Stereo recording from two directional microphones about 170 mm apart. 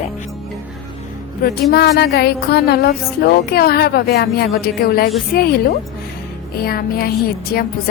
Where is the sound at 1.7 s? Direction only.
70° left (ahead or behind).